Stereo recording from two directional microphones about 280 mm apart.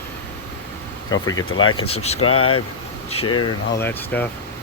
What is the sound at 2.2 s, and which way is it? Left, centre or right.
Speech, left.